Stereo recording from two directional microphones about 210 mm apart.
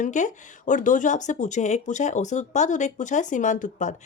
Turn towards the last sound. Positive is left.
turn(degrees=35)  # may be behind; listen again after turning